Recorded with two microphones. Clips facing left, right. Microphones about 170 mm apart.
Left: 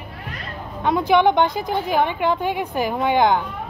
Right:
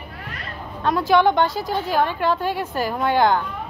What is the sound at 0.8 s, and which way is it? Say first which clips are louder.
A woman's voice: left 1 dB; 20° left (ahead or behind).